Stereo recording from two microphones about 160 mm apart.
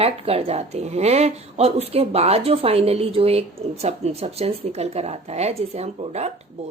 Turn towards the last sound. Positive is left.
turn(degrees=-40)  # may be behind; listen again after turning